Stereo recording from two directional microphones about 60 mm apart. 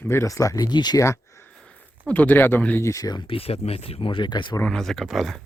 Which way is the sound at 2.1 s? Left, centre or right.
Left.